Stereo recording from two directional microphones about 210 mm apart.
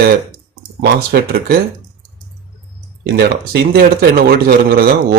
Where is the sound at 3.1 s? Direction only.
50° right (ahead or behind).